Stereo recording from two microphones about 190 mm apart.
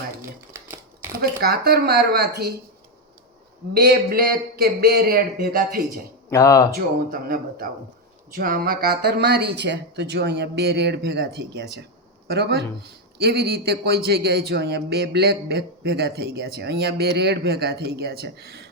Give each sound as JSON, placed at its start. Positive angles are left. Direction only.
{"t": 0.2, "sound": "typewriter", "side_deg": -15}
{"t": 1.2, "sound": "a man's voice", "side_deg": -55}
{"t": 3.8, "sound": "a man's voice", "side_deg": -55}
{"t": 6.3, "sound": "speech", "side_deg": 20}
{"t": 6.7, "sound": "a man's voice", "side_deg": -50}